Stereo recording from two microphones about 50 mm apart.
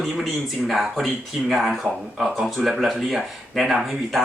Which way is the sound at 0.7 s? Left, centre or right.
Centre.